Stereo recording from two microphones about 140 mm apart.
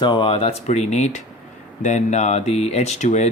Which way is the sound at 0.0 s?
35° left (ahead or behind).